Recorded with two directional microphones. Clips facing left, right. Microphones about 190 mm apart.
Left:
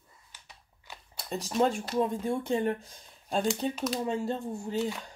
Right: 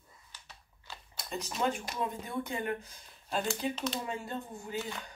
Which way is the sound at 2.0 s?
30° left (ahead or behind).